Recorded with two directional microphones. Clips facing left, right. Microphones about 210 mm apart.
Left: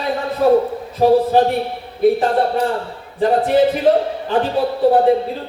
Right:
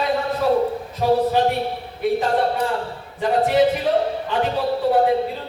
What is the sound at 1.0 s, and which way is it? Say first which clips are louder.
Speech: left 6 dB; 40° left (ahead or behind).